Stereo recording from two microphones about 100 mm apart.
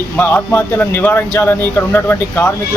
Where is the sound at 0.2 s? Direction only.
20° left (ahead or behind).